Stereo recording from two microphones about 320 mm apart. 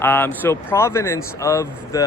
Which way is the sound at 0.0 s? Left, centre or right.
Centre.